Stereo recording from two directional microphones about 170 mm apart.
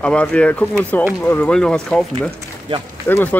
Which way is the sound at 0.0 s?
5° left (ahead or behind).